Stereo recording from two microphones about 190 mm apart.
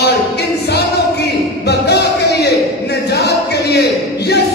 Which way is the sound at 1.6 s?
60° left (ahead or behind).